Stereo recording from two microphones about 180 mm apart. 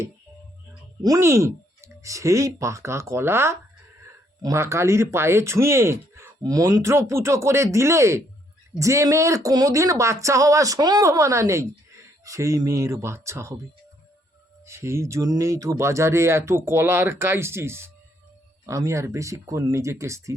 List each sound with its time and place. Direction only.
1.0 s speech: 15° right (ahead or behind)
14.6 s speech: 15° right (ahead or behind)